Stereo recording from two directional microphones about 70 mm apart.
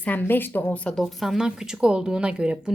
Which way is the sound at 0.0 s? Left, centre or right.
Left.